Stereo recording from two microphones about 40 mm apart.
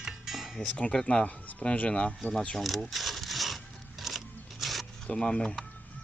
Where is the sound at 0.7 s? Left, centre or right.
Left.